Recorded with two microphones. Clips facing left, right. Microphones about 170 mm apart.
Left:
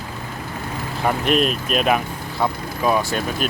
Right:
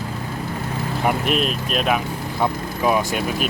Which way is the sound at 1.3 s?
Centre (ahead or behind).